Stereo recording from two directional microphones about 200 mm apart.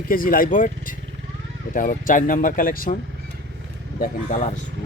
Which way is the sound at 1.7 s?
40° left (ahead or behind).